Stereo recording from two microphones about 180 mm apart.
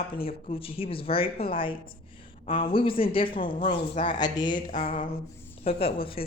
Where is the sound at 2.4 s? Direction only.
30° left (ahead or behind).